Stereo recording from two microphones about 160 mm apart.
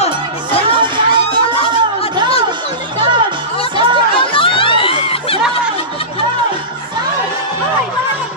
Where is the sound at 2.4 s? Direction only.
30° right (ahead or behind).